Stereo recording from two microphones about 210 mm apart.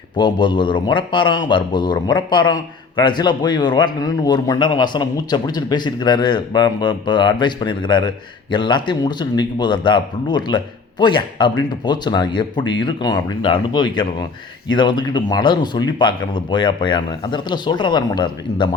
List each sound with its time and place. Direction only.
0.2 s a man's voice: 20° left (ahead or behind)